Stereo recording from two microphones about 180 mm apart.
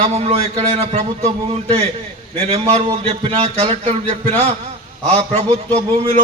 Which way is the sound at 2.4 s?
35° right (ahead or behind).